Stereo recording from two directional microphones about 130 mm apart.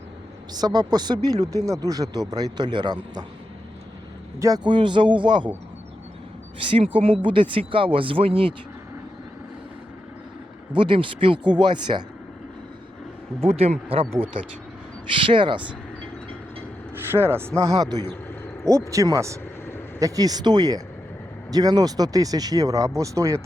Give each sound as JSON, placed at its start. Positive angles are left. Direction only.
{"t": 0.5, "sound": "speech", "side_deg": -30}
{"t": 4.4, "sound": "speech", "side_deg": -25}
{"t": 6.7, "sound": "speech", "side_deg": -45}
{"t": 10.8, "sound": "speech", "side_deg": -40}
{"t": 13.4, "sound": "speech", "side_deg": -55}
{"t": 16.9, "sound": "speech", "side_deg": -15}